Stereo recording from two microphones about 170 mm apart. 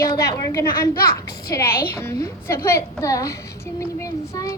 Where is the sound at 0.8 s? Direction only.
60° left (ahead or behind).